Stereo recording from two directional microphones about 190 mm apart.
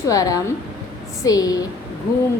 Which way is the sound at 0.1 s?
20° left (ahead or behind).